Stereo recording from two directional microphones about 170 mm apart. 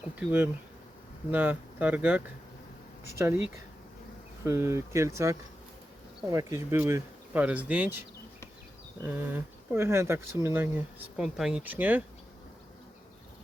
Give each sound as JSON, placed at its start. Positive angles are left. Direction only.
{"t": 0.2, "sound": "speech", "side_deg": -10}
{"t": 9.0, "sound": "speech", "side_deg": -15}